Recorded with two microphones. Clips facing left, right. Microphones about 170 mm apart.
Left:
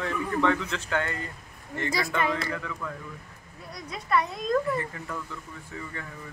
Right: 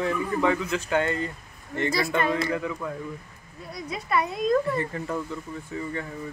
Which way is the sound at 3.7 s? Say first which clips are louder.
Even; 5° right (ahead or behind).